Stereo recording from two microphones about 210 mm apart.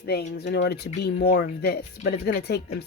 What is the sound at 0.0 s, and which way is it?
Speech, 50° left (ahead or behind).